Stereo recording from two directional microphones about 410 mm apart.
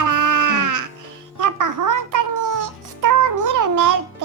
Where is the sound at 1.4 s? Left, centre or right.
Right.